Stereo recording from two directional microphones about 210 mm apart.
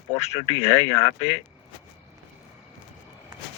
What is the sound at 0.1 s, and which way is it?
Speech, 30° left (ahead or behind).